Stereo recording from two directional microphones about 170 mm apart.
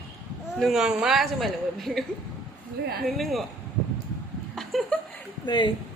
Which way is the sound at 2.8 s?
70° right (ahead or behind).